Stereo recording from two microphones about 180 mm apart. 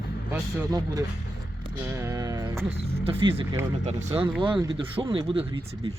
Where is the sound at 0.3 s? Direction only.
20° right (ahead or behind).